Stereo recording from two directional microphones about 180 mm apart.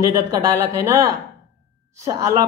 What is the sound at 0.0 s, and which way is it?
Speech, 20° right (ahead or behind).